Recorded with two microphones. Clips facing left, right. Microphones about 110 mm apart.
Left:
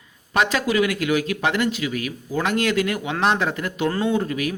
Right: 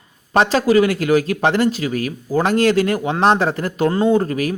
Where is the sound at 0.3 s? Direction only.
35° right (ahead or behind).